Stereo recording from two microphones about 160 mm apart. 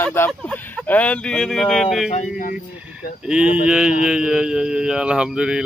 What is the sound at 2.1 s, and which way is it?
Speech, 55° left (ahead or behind).